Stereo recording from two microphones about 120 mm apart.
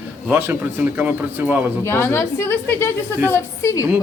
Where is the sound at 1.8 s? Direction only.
20° left (ahead or behind).